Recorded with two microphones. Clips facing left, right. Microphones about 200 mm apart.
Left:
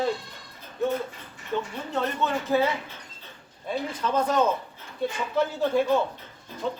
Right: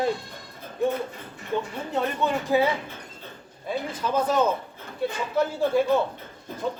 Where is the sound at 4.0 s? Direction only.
10° right (ahead or behind).